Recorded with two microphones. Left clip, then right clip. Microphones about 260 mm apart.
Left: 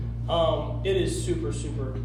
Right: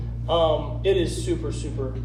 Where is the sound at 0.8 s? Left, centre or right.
Right.